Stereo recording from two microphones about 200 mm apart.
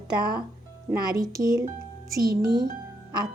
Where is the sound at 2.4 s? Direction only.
20° right (ahead or behind).